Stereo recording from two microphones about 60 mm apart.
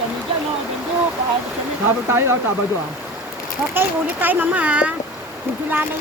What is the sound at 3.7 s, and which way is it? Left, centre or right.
Speech, right.